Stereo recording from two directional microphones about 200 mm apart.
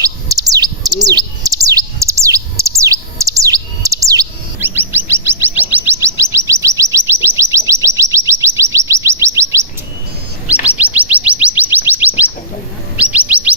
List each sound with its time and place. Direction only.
0.0 s bird: 15° right (ahead or behind)
6.9 s a sound: 15° right (ahead or behind)
7.7 s bird: 15° right (ahead or behind)
10.8 s bird: 5° right (ahead or behind)
13.0 s chirp: 5° right (ahead or behind)